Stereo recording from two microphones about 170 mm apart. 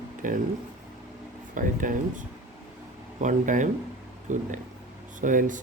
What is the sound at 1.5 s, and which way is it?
Speech, 50° right (ahead or behind).